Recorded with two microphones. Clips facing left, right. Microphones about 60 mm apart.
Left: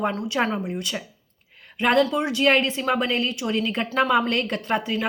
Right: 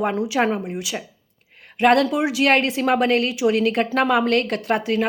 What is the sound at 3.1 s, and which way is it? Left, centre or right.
Speech, right.